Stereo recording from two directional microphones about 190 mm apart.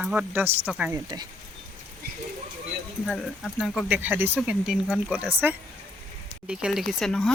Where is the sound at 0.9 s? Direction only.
20° right (ahead or behind).